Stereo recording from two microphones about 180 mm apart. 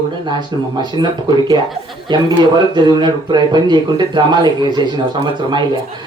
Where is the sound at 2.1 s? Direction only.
25° right (ahead or behind).